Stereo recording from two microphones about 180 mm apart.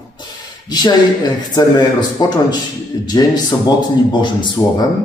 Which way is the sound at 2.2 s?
25° left (ahead or behind).